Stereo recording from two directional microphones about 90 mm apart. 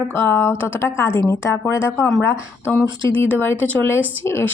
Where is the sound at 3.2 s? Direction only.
25° left (ahead or behind).